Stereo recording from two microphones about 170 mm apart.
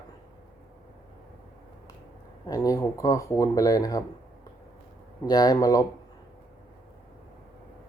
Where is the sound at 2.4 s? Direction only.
20° left (ahead or behind).